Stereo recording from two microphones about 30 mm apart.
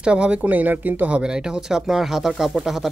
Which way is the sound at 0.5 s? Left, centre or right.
Right.